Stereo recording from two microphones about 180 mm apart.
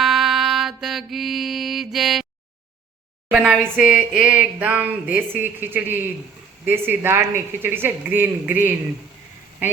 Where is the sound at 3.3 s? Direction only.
5° right (ahead or behind).